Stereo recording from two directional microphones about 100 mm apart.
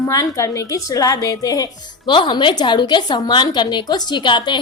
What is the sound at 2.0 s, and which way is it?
A woman's voice, 50° left (ahead or behind).